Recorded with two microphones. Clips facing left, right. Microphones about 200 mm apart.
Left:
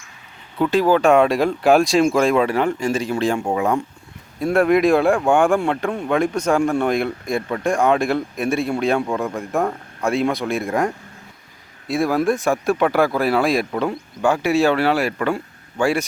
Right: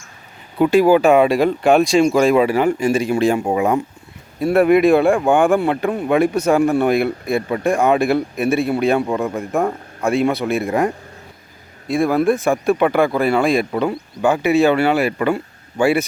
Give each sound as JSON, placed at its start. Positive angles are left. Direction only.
{"t": 0.6, "sound": "speech", "side_deg": -10}